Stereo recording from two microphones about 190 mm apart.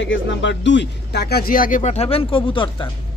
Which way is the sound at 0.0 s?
75° left (ahead or behind).